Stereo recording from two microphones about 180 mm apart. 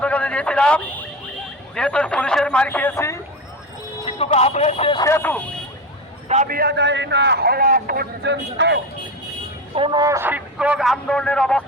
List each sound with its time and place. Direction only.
0.0 s vehicle: 10° left (ahead or behind)
1.7 s a man's voice: 5° left (ahead or behind)
4.0 s speech: 35° left (ahead or behind)
4.9 s speech: 15° left (ahead or behind)
6.2 s a man's voice: 40° right (ahead or behind)
6.5 s a man's voice: 65° right (ahead or behind); by 8.8 s 80° right
9.7 s a man's voice: 25° right (ahead or behind); by 11.6 s 5° left (ahead or behind)